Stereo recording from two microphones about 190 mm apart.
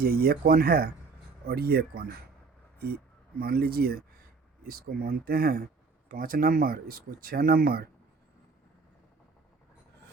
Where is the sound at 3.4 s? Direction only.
50° right (ahead or behind).